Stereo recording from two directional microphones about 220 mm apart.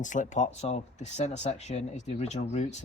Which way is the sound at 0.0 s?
35° left (ahead or behind).